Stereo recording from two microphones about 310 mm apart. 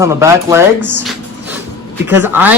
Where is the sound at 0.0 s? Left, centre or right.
Centre.